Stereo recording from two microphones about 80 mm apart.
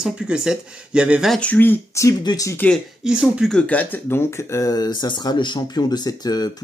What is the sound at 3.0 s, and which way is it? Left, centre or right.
Speech, centre.